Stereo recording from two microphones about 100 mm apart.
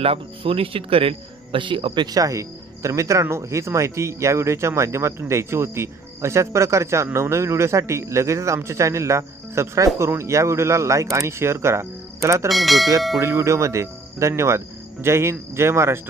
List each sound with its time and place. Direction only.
0.0 s speech: 65° right (ahead or behind)
2.0 s speech: 35° right (ahead or behind)
12.4 s speech: centre (ahead or behind)
13.2 s speech: 30° right (ahead or behind)